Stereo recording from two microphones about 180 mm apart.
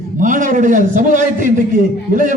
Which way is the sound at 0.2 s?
45° right (ahead or behind).